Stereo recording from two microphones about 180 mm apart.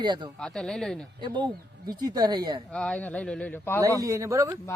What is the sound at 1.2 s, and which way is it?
A man's voice, 25° right (ahead or behind).